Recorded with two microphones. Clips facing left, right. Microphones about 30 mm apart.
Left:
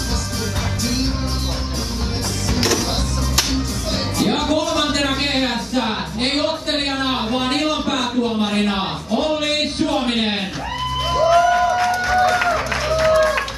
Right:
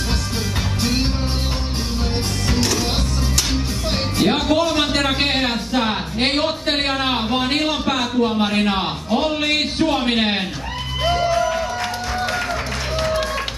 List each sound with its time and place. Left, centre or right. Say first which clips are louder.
4.2 s a sound: right 2 dB; right
7.2 s a man's voice: even; right
11.0 s music: even; centre
11.2 s music: left 5 dB; centre